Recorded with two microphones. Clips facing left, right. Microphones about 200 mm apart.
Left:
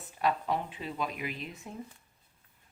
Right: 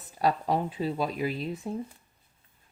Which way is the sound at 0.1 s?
40° right (ahead or behind).